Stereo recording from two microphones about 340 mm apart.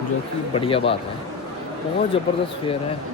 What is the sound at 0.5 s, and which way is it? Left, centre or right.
Speech, centre.